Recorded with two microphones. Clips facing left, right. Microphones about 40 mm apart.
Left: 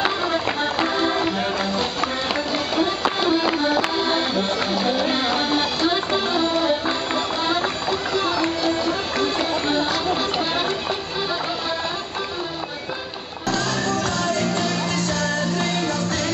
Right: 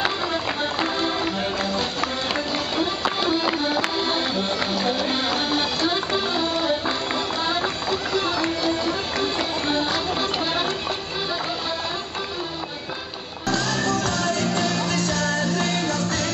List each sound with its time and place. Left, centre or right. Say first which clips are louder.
0.0 s music: left 3 dB; centre
9.4 s run: left 2 dB; centre
13.8 s music: even; left
14.5 s music: even; centre
14.9 s music: even; left